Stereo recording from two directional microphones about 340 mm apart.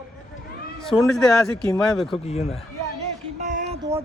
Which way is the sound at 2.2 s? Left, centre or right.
Centre.